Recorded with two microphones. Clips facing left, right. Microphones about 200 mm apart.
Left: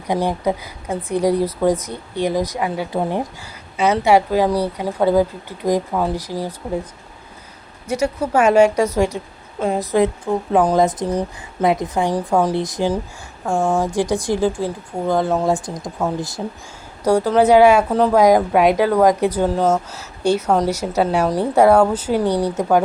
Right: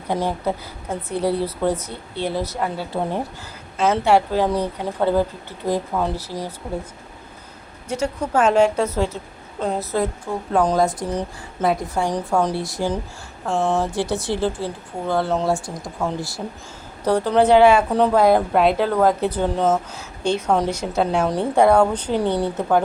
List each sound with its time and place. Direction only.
0.1 s a woman's voice: 15° left (ahead or behind)
7.9 s a woman's voice: 10° left (ahead or behind)
22.2 s speech: 25° right (ahead or behind)